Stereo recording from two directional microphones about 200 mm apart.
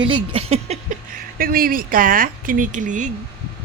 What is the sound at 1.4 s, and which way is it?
Speech, 45° right (ahead or behind).